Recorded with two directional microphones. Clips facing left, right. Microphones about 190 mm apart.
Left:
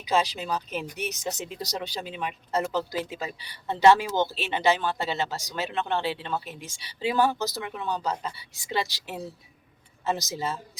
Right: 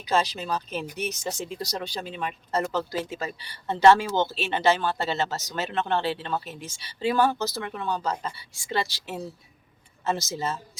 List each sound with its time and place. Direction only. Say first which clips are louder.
0.0 s speech: even; 15° left (ahead or behind)